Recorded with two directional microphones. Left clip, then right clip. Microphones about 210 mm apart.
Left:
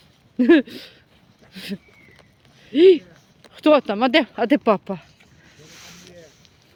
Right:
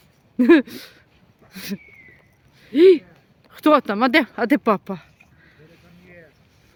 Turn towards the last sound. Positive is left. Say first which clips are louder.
# left 1 dB
turn(degrees=-15)  # may be behind; listen again after turning